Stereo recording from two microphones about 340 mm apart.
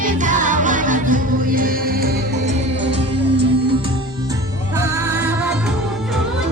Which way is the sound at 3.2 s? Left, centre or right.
Right.